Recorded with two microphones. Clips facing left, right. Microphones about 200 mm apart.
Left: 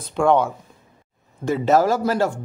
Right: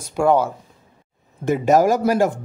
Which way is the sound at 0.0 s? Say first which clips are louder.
Right 1 dB; 5° right (ahead or behind).